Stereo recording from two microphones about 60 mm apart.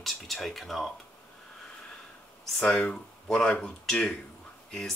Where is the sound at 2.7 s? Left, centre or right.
Centre.